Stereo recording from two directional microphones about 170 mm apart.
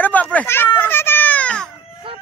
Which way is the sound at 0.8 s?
15° left (ahead or behind).